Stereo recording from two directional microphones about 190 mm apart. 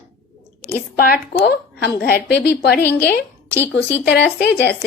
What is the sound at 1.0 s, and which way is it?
A woman's voice, 55° left (ahead or behind).